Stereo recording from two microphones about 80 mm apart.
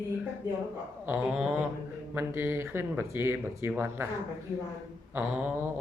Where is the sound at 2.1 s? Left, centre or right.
Right.